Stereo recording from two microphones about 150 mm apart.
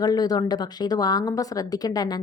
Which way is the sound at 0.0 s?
25° left (ahead or behind).